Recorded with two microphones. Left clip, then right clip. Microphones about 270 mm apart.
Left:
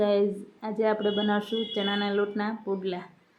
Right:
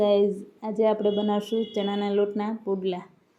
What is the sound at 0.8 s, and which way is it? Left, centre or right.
A woman's voice, centre.